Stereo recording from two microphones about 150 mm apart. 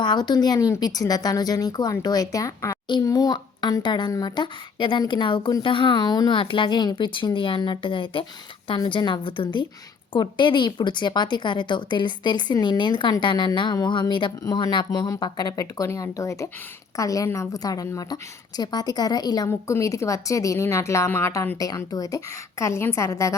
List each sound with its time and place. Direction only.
0.0 s a woman's voice: 30° left (ahead or behind)